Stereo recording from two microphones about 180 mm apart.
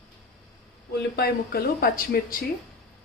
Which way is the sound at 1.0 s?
60° left (ahead or behind).